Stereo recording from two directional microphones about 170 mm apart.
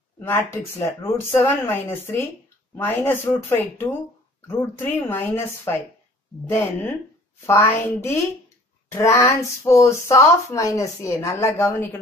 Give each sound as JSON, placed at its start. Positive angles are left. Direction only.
{"t": 0.2, "sound": "speech", "side_deg": 15}